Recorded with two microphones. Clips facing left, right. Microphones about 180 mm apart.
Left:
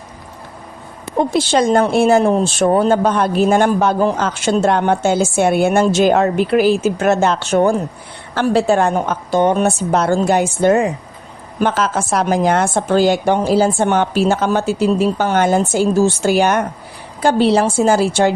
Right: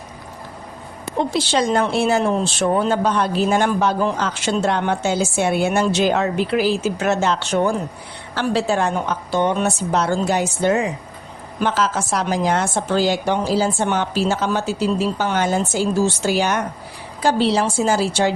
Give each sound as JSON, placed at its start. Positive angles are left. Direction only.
{"t": 1.2, "sound": "speech", "side_deg": 50}